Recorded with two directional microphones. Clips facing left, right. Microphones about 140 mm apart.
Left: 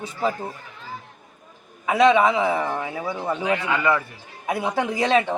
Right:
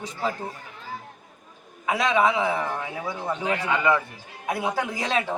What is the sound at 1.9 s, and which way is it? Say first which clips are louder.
Speech: left 5 dB; centre (ahead or behind).